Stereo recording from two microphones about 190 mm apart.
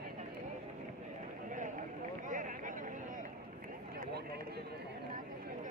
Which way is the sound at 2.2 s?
45° right (ahead or behind).